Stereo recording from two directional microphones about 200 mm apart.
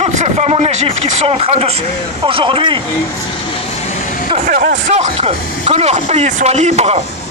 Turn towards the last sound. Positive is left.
turn(degrees=-30)  # may be behind; listen again after turning